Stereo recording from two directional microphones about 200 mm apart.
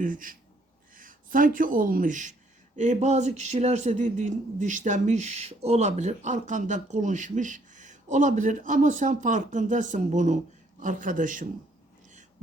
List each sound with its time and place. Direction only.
0.0 s speech: 45° right (ahead or behind)